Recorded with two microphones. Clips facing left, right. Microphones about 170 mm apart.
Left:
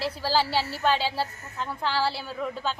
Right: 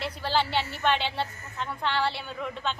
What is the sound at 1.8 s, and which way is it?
Speech, 5° left (ahead or behind).